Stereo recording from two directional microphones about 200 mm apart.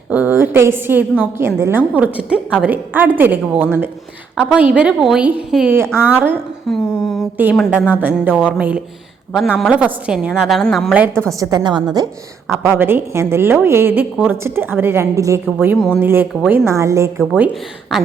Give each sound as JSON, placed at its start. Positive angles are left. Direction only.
{"t": 0.1, "sound": "a woman's voice", "side_deg": -10}
{"t": 6.7, "sound": "a sound", "side_deg": 0}
{"t": 7.5, "sound": "a woman's voice", "side_deg": 0}
{"t": 11.3, "sound": "a woman's voice", "side_deg": -20}